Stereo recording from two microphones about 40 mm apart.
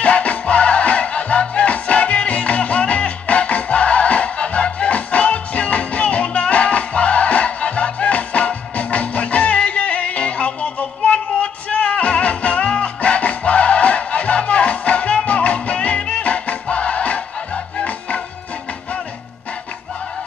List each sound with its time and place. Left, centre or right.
0.0 s music: left
16.0 s music: left